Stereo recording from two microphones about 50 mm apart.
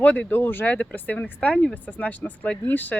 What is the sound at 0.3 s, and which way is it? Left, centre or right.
Speech, left.